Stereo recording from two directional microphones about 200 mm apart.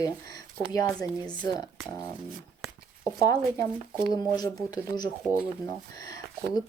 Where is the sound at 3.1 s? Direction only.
20° left (ahead or behind).